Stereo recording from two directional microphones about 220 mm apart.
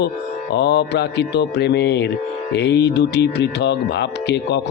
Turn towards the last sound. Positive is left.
turn(degrees=50)  # may be behind; listen again after turning